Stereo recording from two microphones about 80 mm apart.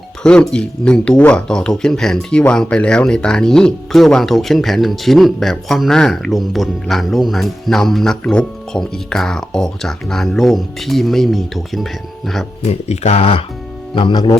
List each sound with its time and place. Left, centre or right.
0.2 s speech: centre
13.9 s speech: left